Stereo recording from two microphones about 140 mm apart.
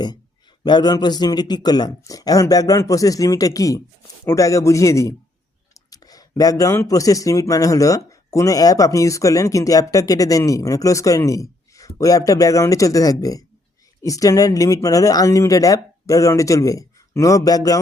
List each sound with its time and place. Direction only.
0.6 s speech: 30° left (ahead or behind)